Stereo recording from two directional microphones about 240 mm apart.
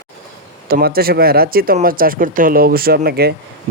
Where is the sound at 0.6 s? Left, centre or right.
Right.